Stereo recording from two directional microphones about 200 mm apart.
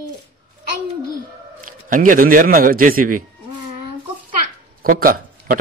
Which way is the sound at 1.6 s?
40° right (ahead or behind).